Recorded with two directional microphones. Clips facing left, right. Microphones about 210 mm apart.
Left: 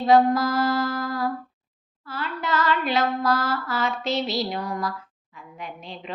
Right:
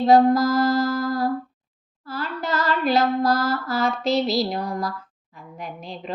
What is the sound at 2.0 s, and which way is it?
A woman's voice, 40° right (ahead or behind).